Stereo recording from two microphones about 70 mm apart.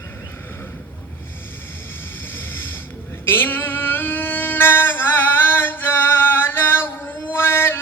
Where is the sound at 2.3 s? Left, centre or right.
Left.